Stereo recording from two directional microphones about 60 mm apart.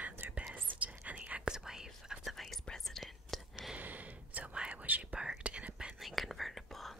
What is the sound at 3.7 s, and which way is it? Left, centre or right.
Gasp, right.